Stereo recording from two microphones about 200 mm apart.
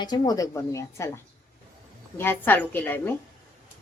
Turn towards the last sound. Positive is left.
turn(degrees=10)  # may be behind; listen again after turning